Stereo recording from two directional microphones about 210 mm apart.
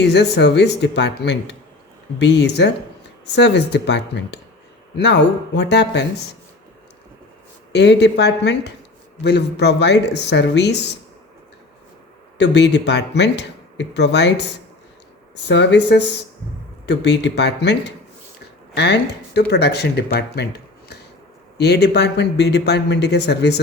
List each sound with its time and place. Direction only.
0.0 s speech: 55° left (ahead or behind)
7.7 s speech: 55° left (ahead or behind)
12.4 s speech: 55° left (ahead or behind)
15.4 s speech: 55° left (ahead or behind)